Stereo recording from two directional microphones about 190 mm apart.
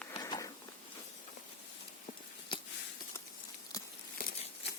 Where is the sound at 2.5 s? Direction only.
25° left (ahead or behind).